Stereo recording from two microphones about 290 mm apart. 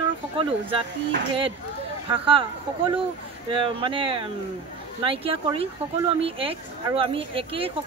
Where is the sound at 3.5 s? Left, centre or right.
Centre.